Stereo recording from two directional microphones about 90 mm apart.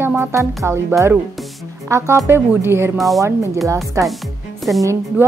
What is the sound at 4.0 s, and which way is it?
Speech, 35° right (ahead or behind).